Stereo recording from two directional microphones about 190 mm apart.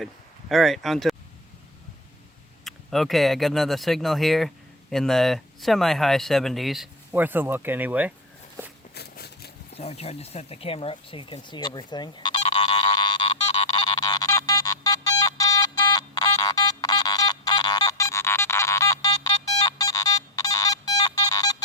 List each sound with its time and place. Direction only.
0.0 s speech: centre (ahead or behind)
2.6 s speech: centre (ahead or behind)
7.1 s speech: 10° right (ahead or behind)
9.0 s a sound: 55° left (ahead or behind)
9.7 s speech: 35° left (ahead or behind)
12.5 s music: 30° left (ahead or behind)